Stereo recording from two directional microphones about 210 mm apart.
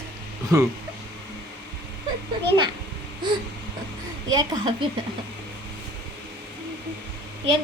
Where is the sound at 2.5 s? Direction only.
20° right (ahead or behind).